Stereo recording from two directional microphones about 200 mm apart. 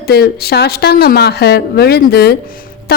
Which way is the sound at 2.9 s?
50° left (ahead or behind).